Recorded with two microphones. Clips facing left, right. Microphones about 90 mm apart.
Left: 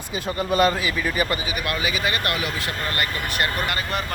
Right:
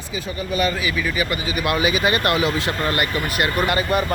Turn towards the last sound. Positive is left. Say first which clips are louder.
# right 6 dB
turn(degrees=-5)  # may be behind; listen again after turning